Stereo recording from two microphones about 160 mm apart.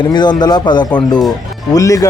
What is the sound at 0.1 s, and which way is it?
A man's voice, 25° left (ahead or behind).